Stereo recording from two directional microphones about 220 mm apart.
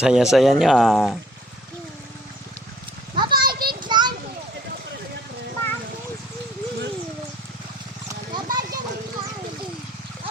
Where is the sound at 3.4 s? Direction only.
45° right (ahead or behind).